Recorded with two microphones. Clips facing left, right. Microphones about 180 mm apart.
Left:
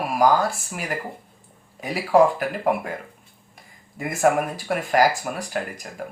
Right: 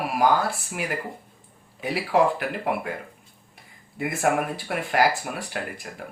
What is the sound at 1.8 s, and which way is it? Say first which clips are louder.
Speech: left 4 dB; 40° left (ahead or behind).